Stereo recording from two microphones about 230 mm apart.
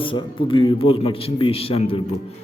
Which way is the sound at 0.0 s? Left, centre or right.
Left.